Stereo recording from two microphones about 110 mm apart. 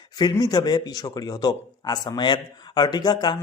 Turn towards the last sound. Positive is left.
turn(degrees=40)  # may be behind; listen again after turning